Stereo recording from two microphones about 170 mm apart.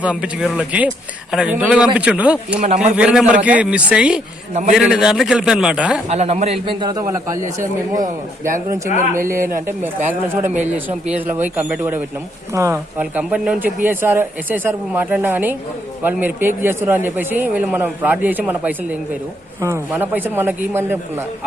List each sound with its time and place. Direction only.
0.0 s a man's voice: 5° right (ahead or behind)
2.6 s speech: 45° right (ahead or behind)
3.0 s a man's voice: 5° right (ahead or behind)
6.1 s a man's voice: 40° right (ahead or behind); by 7.7 s 20° right (ahead or behind)
7.9 s speech: 50° right (ahead or behind)
9.2 s a man's voice: 15° right (ahead or behind)